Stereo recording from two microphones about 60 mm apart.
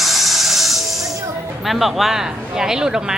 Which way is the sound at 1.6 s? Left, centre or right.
Centre.